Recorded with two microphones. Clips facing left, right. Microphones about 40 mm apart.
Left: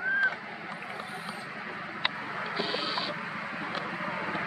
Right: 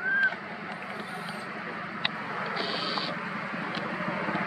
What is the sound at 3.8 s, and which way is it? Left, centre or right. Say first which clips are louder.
Vehicle: right 2 dB; centre.